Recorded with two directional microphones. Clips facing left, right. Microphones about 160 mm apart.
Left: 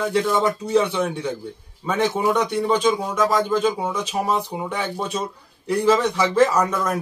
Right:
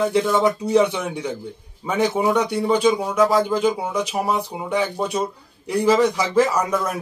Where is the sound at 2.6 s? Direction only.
10° right (ahead or behind).